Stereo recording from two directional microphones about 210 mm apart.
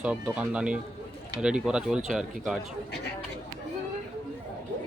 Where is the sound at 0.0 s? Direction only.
5° right (ahead or behind).